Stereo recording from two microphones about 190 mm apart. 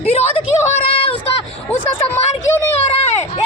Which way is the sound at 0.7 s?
30° left (ahead or behind).